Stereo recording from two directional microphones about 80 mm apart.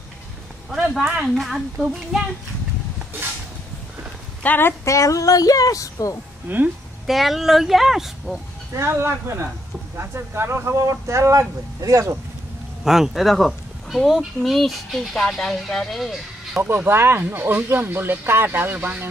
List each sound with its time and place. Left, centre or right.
1.2 s speech: centre
4.4 s a woman's voice: left
4.8 s a woman's voice: left
6.5 s speech: right
7.1 s speech: centre
8.7 s speech: right
12.8 s speech: centre
16.6 s speech: right